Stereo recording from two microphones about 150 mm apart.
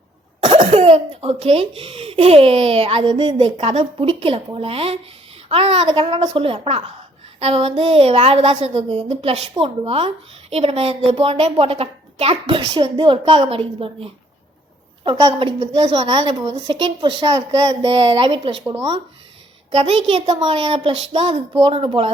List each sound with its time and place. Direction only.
0.4 s speech: 40° right (ahead or behind)
15.5 s speech: 45° right (ahead or behind)
16.0 s speech: 30° right (ahead or behind)
19.7 s speech: 40° right (ahead or behind)